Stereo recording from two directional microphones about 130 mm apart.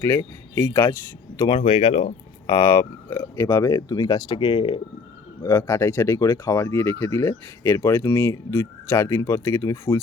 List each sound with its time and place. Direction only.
0.0 s speech: 20° left (ahead or behind)
1.5 s speech: 45° left (ahead or behind)
2.5 s speech: 25° left (ahead or behind); by 4.8 s 40° left (ahead or behind)
5.4 s speech: 20° left (ahead or behind)